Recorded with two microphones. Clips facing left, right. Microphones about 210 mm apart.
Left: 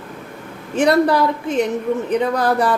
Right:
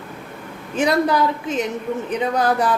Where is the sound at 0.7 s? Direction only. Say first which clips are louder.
Left 3 dB; 65° left (ahead or behind).